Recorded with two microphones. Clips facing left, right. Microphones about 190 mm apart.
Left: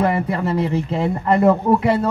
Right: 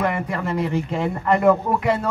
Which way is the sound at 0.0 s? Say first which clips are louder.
Left 4 dB; 30° left (ahead or behind).